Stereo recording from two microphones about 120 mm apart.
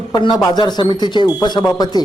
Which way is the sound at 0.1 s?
35° left (ahead or behind).